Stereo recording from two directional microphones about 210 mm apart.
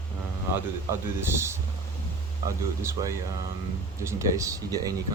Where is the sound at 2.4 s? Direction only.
15° right (ahead or behind).